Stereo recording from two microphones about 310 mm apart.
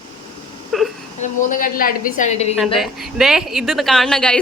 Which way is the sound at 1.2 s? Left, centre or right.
Left.